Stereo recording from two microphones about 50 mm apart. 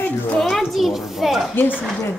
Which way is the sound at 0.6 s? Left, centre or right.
Centre.